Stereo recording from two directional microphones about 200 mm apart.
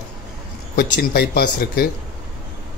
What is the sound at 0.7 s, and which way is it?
Speech, 50° left (ahead or behind).